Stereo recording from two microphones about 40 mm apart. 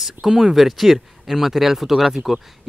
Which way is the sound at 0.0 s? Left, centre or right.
Centre.